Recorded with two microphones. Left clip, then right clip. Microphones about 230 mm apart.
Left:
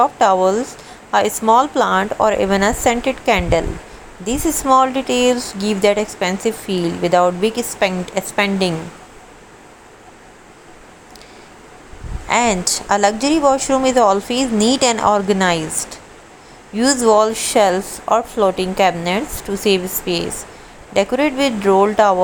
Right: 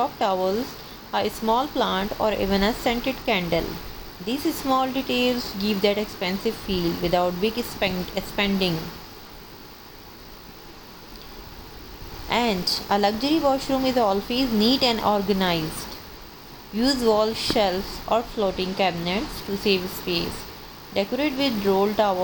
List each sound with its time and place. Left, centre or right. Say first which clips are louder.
0.0 s speech: left 10 dB; left
12.3 s speech: left 7 dB; left
16.7 s speech: left 8 dB; left